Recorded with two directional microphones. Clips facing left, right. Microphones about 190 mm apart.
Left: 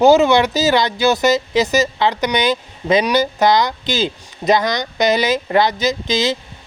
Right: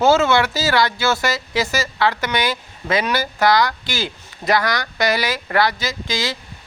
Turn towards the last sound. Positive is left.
turn(degrees=20)  # may be behind; listen again after turning